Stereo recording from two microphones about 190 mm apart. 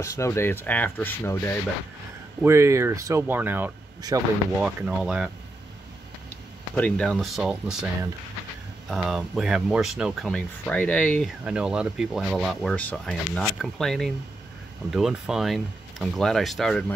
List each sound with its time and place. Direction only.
0.0 s speech: 15° left (ahead or behind)
2.4 s speech: 15° right (ahead or behind)
4.6 s speech: 5° right (ahead or behind)
6.7 s speech: 5° left (ahead or behind)
8.8 s speech: centre (ahead or behind)
11.4 s speech: 5° right (ahead or behind)